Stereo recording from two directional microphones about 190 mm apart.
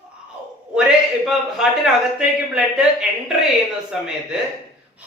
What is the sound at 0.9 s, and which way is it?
Speech, centre (ahead or behind).